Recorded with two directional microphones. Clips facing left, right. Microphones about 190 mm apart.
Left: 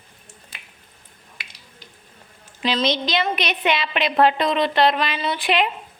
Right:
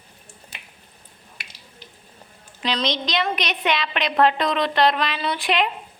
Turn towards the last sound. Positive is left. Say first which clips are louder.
# left 1 dB
turn(degrees=0)  # may be behind; listen again after turning